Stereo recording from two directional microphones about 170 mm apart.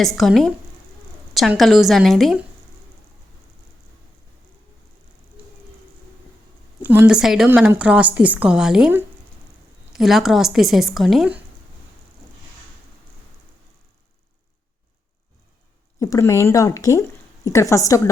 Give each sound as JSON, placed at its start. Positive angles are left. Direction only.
{"t": 0.0, "sound": "a woman's voice", "side_deg": 0}
{"t": 6.8, "sound": "a woman's voice", "side_deg": -10}
{"t": 16.0, "sound": "speech", "side_deg": 20}